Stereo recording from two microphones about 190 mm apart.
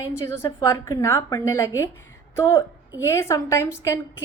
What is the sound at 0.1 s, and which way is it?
A woman's voice, 15° left (ahead or behind).